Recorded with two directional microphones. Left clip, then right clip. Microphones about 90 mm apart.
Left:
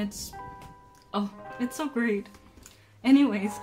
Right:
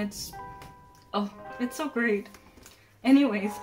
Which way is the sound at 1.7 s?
30° left (ahead or behind).